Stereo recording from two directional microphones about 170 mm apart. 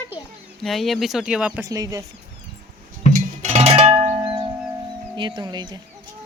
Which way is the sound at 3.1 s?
45° right (ahead or behind).